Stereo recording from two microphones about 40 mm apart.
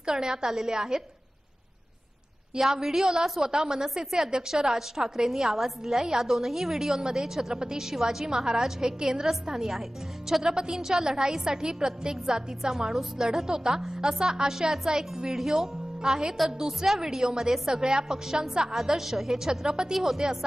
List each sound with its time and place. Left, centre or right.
0.0 s a woman's voice: centre
2.6 s a woman's voice: centre